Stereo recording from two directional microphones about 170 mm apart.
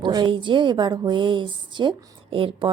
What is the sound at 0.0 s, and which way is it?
A woman's voice, 25° right (ahead or behind).